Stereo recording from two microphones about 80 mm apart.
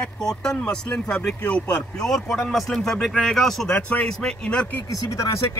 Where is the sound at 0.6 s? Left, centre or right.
Centre.